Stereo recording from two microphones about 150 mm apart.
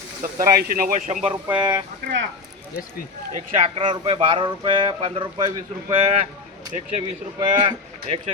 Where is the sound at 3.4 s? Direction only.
50° right (ahead or behind); by 5.9 s 25° right (ahead or behind).